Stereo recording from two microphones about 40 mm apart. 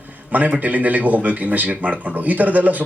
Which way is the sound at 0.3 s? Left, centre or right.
Right.